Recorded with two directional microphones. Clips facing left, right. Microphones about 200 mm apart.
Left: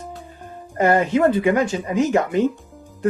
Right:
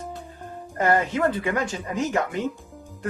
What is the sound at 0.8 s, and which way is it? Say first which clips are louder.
Speech: left 5 dB; 15° left (ahead or behind).